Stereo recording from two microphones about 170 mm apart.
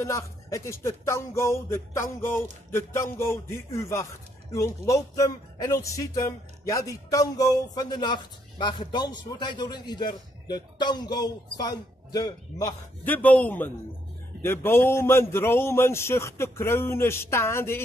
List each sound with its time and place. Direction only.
0.0 s a man's voice: 15° left (ahead or behind)
13.0 s speech: 10° left (ahead or behind)